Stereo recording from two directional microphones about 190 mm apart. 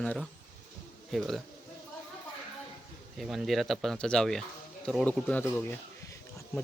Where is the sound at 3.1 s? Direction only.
Centre (ahead or behind).